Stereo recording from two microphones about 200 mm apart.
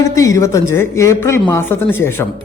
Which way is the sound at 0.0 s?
15° left (ahead or behind).